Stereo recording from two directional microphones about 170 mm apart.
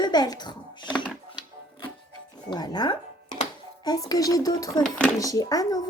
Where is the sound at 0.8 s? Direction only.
5° left (ahead or behind).